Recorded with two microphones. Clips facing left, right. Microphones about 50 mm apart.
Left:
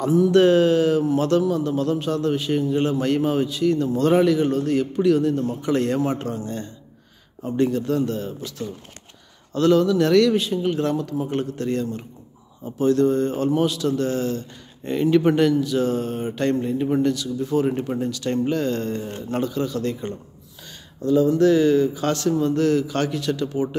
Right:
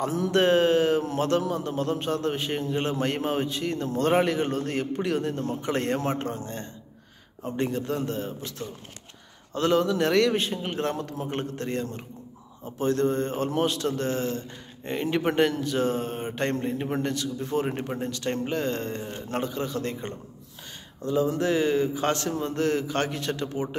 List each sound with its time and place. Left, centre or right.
0.3 s a man's voice: right
10.3 s a man's voice: right
21.0 s a man's voice: centre